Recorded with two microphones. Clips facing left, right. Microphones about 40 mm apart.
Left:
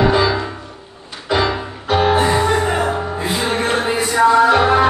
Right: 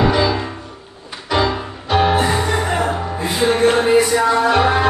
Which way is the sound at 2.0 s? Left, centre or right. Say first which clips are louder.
Left 2 dB; left.